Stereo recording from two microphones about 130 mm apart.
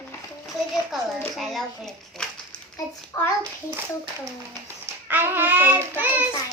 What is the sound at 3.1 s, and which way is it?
Speech, 20° left (ahead or behind).